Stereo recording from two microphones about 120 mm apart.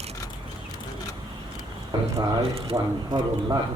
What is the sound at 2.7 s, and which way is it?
Speech, 40° right (ahead or behind).